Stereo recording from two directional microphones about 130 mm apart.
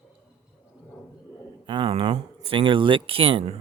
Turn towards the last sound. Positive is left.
turn(degrees=-45)  # may be behind; listen again after turning